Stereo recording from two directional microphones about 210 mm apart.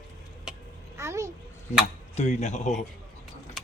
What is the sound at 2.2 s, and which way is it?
Speech, 35° left (ahead or behind).